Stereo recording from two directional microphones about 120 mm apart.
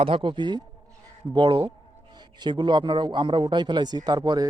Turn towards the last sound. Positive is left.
turn(degrees=-35)  # may be behind; listen again after turning